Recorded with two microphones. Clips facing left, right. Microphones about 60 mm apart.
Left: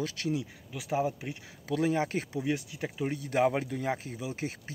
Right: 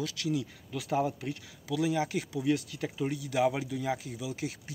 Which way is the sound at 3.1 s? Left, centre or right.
Left.